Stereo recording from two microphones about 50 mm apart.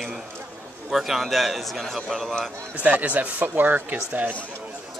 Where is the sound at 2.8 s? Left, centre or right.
Right.